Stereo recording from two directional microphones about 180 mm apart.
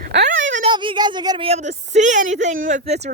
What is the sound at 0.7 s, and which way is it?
Speech, 25° right (ahead or behind).